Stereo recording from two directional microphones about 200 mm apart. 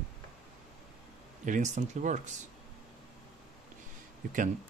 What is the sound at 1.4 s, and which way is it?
Speech, 40° right (ahead or behind).